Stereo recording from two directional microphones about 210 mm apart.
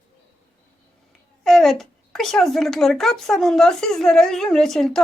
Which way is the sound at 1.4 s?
Centre (ahead or behind).